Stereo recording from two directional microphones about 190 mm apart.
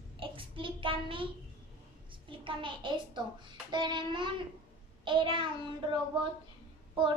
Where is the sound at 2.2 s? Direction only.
25° right (ahead or behind).